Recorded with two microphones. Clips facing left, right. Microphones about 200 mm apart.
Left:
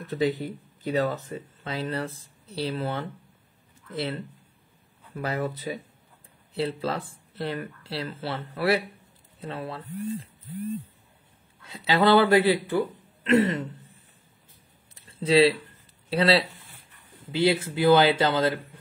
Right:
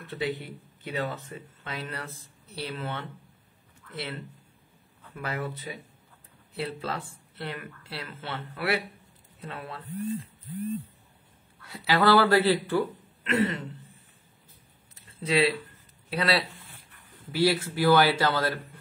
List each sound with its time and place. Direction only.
0.0 s speech: 40° left (ahead or behind)
11.6 s speech: 20° left (ahead or behind)
13.2 s speech: 35° left (ahead or behind)
15.0 s a sound: 30° left (ahead or behind)
16.1 s speech: 30° left (ahead or behind)